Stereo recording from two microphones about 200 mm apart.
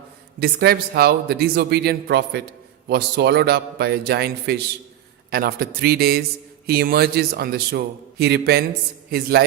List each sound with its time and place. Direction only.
0.3 s a man's voice: 50° right (ahead or behind)